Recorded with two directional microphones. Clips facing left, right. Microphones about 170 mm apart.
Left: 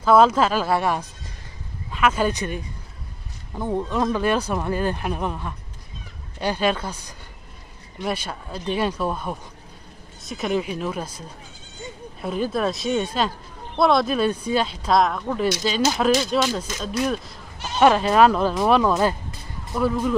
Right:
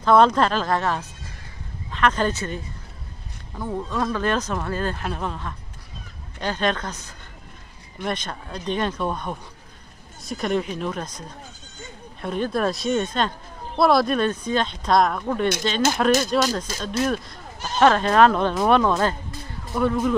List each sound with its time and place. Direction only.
0.0 s speech: 5° left (ahead or behind)
12.2 s speech: 5° left (ahead or behind)